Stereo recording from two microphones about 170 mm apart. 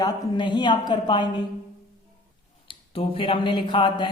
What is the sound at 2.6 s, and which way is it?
Speech, 30° left (ahead or behind).